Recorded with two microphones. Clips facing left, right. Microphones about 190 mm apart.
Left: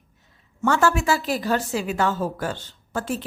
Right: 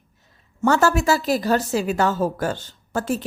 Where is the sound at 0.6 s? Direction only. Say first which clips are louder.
Right 2 dB; 40° right (ahead or behind).